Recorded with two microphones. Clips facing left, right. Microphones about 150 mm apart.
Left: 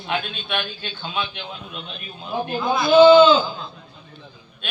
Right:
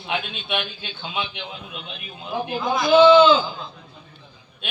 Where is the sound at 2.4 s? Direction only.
15° right (ahead or behind).